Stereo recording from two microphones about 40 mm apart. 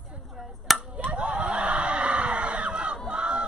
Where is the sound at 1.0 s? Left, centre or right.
Right.